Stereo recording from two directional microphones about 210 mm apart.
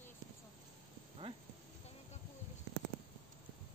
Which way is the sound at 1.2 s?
25° right (ahead or behind).